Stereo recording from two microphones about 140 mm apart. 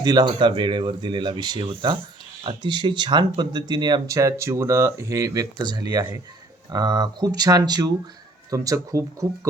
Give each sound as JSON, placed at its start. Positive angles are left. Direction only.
{"t": 0.0, "sound": "speech", "side_deg": -30}